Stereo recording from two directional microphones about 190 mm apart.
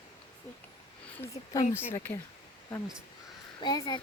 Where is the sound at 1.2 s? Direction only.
15° left (ahead or behind).